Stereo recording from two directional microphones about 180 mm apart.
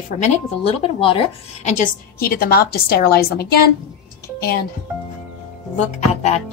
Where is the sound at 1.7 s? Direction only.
50° left (ahead or behind).